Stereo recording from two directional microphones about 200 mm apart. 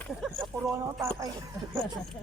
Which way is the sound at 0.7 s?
15° right (ahead or behind).